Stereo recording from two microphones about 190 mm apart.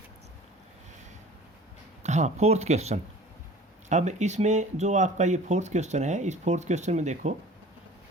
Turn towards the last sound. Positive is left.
turn(degrees=-35)  # may be behind; listen again after turning